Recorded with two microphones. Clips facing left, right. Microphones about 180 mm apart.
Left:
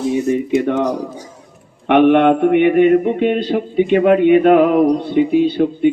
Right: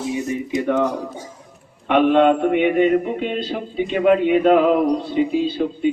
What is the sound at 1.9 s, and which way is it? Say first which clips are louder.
Mantra: left 4 dB; 70° left (ahead or behind).